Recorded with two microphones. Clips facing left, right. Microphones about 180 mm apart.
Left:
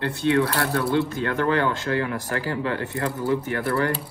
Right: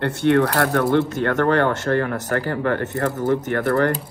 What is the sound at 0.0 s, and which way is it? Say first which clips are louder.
Speech: right 5 dB; 65° right (ahead or behind).